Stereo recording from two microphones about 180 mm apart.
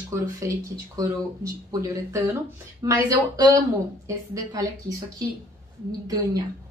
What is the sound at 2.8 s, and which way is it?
A woman's voice, 20° right (ahead or behind).